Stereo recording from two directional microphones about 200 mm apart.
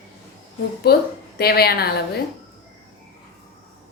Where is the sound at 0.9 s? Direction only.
50° left (ahead or behind).